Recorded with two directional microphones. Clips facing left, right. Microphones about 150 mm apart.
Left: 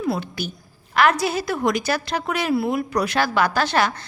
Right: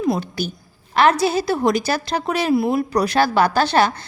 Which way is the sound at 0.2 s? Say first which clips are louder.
Right 4 dB; 35° right (ahead or behind).